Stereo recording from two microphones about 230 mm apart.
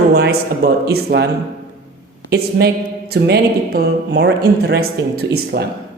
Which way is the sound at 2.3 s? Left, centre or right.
Right.